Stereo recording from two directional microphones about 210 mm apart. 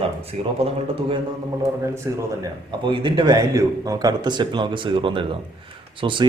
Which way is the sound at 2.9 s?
20° right (ahead or behind).